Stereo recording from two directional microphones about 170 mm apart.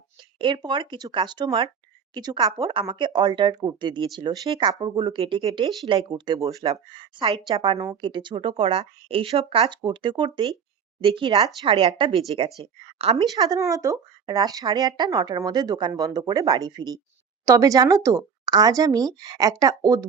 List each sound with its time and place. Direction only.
0.3 s speech: 30° right (ahead or behind)
13.3 s speech: 20° right (ahead or behind)